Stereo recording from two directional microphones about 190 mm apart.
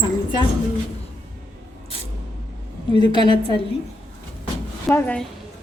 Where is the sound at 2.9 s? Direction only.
25° left (ahead or behind).